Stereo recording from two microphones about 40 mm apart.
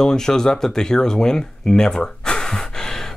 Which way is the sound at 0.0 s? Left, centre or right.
Centre.